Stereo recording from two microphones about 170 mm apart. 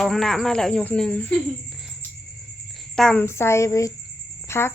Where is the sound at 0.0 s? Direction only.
Centre (ahead or behind).